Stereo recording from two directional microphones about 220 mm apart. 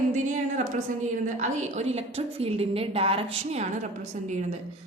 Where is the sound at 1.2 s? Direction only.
30° right (ahead or behind).